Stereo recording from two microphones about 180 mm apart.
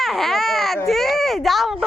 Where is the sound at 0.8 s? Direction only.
Centre (ahead or behind).